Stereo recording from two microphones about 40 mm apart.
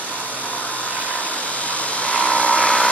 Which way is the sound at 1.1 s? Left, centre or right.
Left.